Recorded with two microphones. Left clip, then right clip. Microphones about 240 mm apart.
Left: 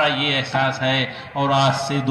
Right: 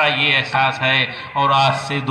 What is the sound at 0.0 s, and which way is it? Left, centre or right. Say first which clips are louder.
A man's voice: right 4 dB; left.